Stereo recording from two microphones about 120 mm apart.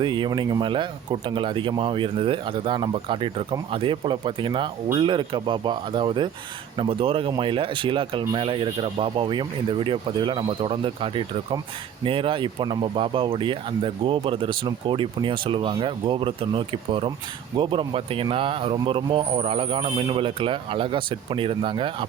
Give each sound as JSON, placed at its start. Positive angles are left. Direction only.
{"t": 0.0, "sound": "speech", "side_deg": -40}